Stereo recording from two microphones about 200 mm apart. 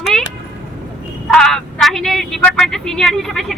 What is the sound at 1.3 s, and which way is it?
Vehicle, centre (ahead or behind).